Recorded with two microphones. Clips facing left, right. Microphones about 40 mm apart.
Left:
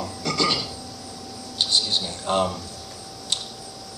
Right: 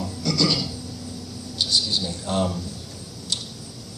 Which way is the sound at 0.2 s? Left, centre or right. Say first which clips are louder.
Right 1 dB; left.